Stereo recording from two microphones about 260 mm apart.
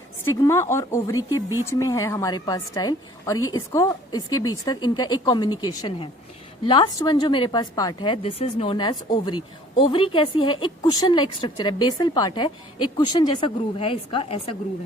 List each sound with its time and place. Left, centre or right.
0.4 s a woman's voice: centre